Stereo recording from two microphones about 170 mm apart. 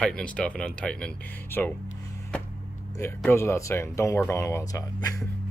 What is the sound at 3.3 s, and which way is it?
Speech, 15° left (ahead or behind).